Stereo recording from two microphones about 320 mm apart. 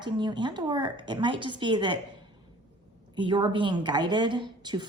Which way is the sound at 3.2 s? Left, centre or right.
Centre.